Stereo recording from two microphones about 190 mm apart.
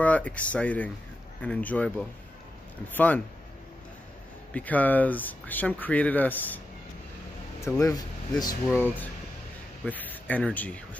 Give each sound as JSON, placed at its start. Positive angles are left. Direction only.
{"t": 0.0, "sound": "speech", "side_deg": 5}
{"t": 4.6, "sound": "speech", "side_deg": 10}
{"t": 7.6, "sound": "speech", "side_deg": 15}
{"t": 8.7, "sound": "speech", "side_deg": 10}